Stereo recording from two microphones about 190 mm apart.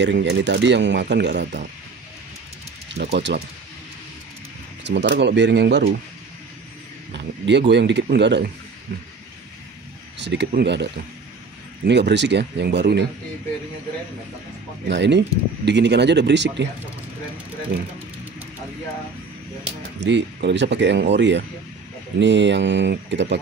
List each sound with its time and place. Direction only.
0.0 s speech: 65° right (ahead or behind)
3.0 s speech: 65° right (ahead or behind)
4.8 s speech: 65° right (ahead or behind)
7.4 s speech: 65° right (ahead or behind)
10.1 s speech: 70° right (ahead or behind)
14.9 s speech: 65° right (ahead or behind)
20.0 s speech: 65° right (ahead or behind)